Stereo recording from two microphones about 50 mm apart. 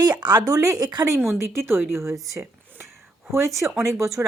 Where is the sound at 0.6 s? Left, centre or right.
Right.